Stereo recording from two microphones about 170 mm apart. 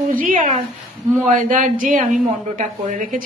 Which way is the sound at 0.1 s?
55° right (ahead or behind).